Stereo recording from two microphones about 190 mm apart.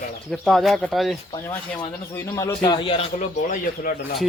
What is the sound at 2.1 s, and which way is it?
Speech, 15° left (ahead or behind).